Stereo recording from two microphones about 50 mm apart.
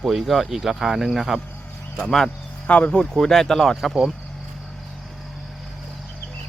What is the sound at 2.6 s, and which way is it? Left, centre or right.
Speech, left.